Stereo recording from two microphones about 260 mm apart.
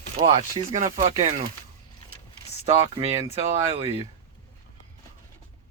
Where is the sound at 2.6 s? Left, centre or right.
Right.